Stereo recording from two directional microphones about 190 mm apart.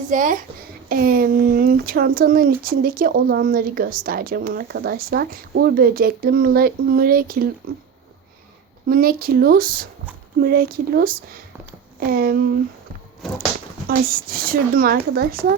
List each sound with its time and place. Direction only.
0.1 s speech: 45° right (ahead or behind)
8.9 s speech: 50° right (ahead or behind)
13.2 s a sound: centre (ahead or behind)
13.8 s speech: 50° right (ahead or behind)